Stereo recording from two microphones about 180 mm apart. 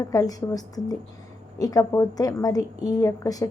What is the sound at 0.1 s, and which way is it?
A woman's voice, 20° left (ahead or behind).